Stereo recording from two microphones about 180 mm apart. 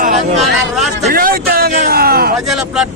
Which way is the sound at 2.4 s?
Centre (ahead or behind).